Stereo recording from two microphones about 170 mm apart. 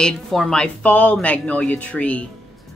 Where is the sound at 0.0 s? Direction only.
5° left (ahead or behind).